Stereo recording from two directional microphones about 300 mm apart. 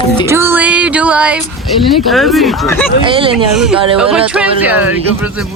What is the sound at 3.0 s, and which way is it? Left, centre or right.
Speech, centre.